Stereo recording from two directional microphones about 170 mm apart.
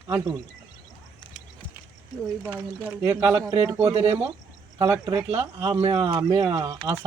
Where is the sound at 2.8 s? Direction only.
15° right (ahead or behind).